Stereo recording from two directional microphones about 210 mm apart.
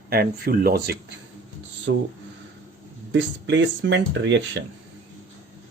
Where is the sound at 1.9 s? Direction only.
60° right (ahead or behind).